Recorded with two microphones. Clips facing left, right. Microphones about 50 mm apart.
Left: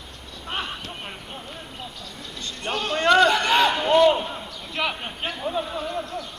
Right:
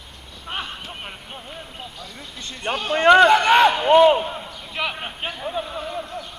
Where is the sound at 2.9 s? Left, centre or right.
Centre.